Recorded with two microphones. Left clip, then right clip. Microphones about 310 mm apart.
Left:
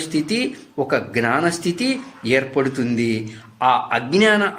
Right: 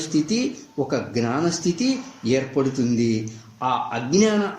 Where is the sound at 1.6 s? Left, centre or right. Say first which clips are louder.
Left 2 dB; left.